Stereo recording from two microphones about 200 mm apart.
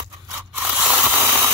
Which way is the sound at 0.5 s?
10° right (ahead or behind).